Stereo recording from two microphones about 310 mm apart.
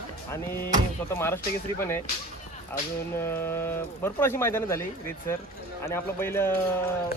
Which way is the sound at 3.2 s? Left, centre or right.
Centre.